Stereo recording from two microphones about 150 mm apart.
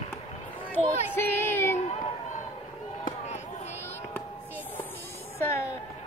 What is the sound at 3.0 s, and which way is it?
Chop, 50° left (ahead or behind).